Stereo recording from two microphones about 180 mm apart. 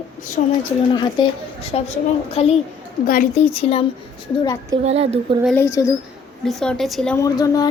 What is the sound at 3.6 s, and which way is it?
Speech, 35° left (ahead or behind).